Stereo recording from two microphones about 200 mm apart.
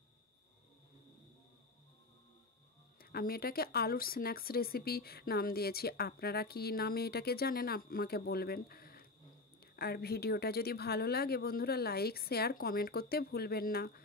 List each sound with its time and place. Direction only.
3.0 s speech: 50° left (ahead or behind)